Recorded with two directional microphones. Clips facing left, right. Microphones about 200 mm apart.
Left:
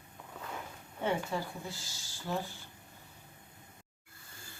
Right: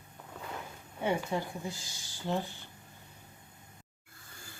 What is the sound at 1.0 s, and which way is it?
Speech, 15° right (ahead or behind).